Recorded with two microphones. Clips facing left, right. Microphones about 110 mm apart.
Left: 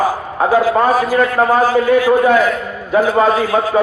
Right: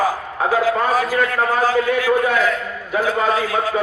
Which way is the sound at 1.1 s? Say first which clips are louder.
Left 6 dB; 35° left (ahead or behind).